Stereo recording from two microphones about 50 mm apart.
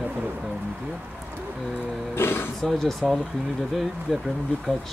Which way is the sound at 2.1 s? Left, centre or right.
Left.